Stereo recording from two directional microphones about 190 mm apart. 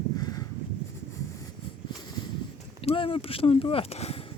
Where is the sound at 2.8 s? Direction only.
30° left (ahead or behind).